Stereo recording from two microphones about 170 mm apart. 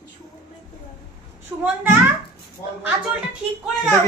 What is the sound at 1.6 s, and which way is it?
Speech, 10° right (ahead or behind).